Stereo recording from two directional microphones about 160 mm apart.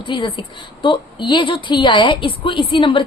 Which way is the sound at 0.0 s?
30° left (ahead or behind).